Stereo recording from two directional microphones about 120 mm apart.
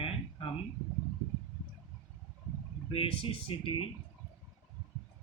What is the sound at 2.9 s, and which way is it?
Speech, 45° left (ahead or behind).